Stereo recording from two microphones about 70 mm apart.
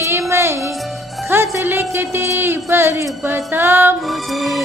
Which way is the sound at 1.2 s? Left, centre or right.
Right.